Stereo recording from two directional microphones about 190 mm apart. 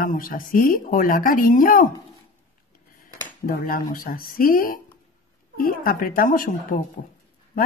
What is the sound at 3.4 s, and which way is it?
Speech, 50° left (ahead or behind).